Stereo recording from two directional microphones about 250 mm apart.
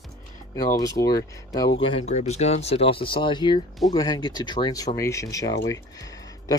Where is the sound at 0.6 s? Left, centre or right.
Centre.